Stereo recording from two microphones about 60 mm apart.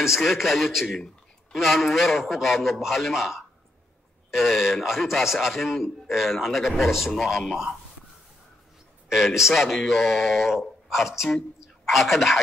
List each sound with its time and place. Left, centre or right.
0.0 s a man's voice: centre
9.1 s a man's voice: centre